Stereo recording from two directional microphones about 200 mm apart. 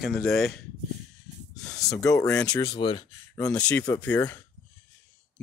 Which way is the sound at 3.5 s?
5° left (ahead or behind).